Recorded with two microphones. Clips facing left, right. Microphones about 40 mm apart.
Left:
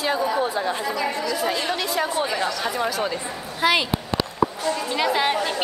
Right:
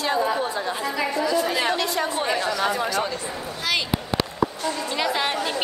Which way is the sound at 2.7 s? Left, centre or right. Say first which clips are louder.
Even; centre.